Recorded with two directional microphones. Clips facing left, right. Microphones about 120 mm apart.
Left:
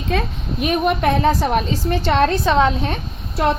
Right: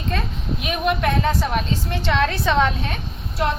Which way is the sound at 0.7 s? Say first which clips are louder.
Left 4 dB; 45° left (ahead or behind).